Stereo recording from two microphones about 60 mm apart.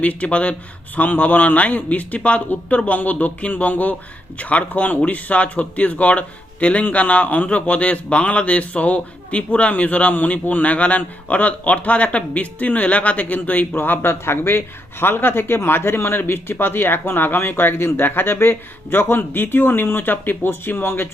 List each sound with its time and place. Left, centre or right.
0.0 s speech: left